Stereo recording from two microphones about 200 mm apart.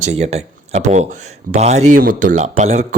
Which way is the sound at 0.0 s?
30° right (ahead or behind).